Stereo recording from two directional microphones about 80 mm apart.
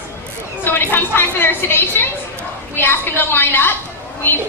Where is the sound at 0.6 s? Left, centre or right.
Left.